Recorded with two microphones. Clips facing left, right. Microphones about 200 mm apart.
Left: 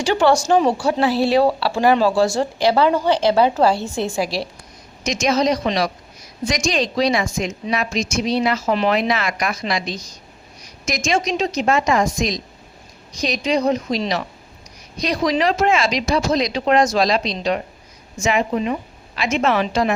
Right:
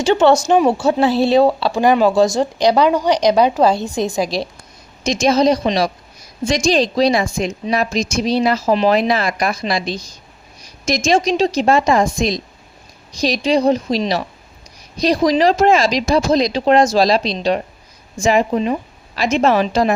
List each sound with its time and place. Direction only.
0.0 s speech: 20° right (ahead or behind)
5.0 s a woman's voice: 30° right (ahead or behind)